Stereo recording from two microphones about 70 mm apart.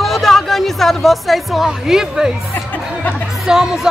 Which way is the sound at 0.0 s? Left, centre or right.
Centre.